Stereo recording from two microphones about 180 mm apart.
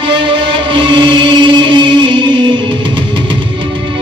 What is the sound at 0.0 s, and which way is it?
Music, 30° right (ahead or behind).